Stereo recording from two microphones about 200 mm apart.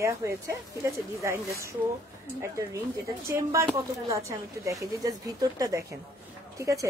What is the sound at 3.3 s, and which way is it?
Speech, 15° right (ahead or behind).